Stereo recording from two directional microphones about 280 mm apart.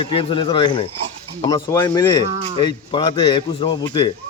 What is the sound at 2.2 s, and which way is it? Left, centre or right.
Speech, right.